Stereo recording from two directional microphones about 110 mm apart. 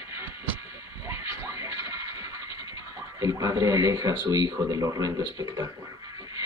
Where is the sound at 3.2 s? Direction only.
30° right (ahead or behind).